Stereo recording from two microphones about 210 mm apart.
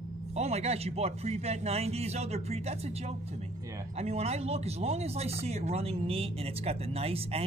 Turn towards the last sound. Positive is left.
turn(degrees=-30)  # may be behind; listen again after turning